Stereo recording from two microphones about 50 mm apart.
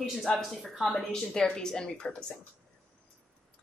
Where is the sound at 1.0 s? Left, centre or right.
Centre.